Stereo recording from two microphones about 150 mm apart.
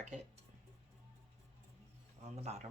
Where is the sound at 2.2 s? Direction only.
45° right (ahead or behind).